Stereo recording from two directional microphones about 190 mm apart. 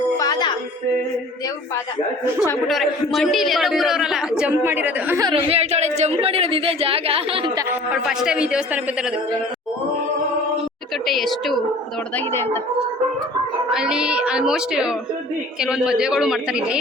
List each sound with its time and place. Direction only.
0.2 s music: 20° left (ahead or behind)
2.6 s a man's voice: centre (ahead or behind)
5.3 s a woman's voice: 35° right (ahead or behind)
7.9 s a man's voice: 5° right (ahead or behind)
11.0 s a man's voice: centre (ahead or behind)
12.1 s a woman's voice: 15° left (ahead or behind)
13.7 s a man's voice: 5° right (ahead or behind)